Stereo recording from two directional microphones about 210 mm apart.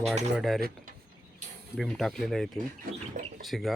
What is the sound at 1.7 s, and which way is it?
Speech, centre (ahead or behind).